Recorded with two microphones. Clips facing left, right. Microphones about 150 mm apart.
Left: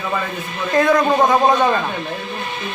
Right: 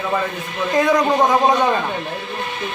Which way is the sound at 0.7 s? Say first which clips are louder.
Left 1 dB; 15° right (ahead or behind).